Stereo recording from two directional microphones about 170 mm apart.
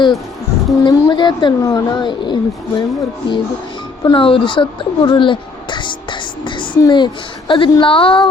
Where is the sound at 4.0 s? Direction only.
30° left (ahead or behind).